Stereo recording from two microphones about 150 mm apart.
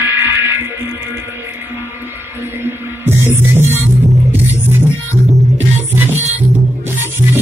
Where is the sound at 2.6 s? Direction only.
15° right (ahead or behind).